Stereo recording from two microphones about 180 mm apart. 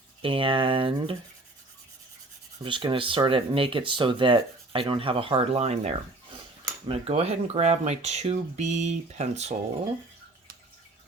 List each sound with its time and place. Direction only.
0.2 s speech: 30° right (ahead or behind)
2.6 s speech: 30° right (ahead or behind)